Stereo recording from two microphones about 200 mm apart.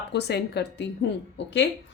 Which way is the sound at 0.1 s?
55° left (ahead or behind).